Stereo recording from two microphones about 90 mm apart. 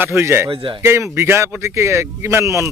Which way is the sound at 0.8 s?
30° right (ahead or behind).